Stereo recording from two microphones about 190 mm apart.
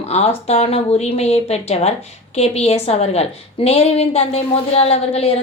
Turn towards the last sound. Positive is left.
turn(degrees=30)  # may be behind; listen again after turning